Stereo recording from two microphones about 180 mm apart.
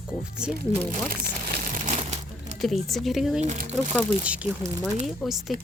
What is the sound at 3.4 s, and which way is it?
Speech, 40° right (ahead or behind).